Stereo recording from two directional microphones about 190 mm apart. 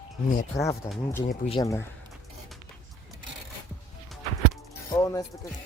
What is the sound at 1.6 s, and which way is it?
Speech, 15° left (ahead or behind).